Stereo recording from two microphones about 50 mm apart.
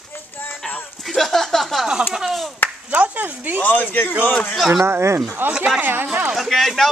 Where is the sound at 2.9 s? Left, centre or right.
Right.